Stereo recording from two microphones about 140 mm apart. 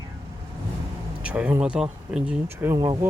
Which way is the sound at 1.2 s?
10° right (ahead or behind).